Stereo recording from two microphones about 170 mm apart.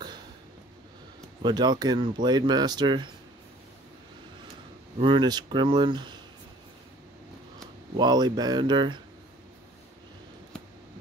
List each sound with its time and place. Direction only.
1.4 s speech: 25° right (ahead or behind)
4.9 s speech: 30° right (ahead or behind)
8.0 s speech: 25° right (ahead or behind)